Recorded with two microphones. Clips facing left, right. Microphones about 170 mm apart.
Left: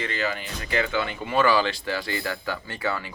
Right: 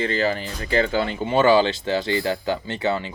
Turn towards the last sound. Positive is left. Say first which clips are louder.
# right 5 dB
turn(degrees=-25)  # may be behind; listen again after turning